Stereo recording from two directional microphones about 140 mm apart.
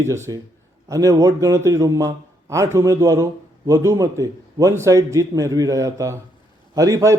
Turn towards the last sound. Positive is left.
turn(degrees=-20)  # may be behind; listen again after turning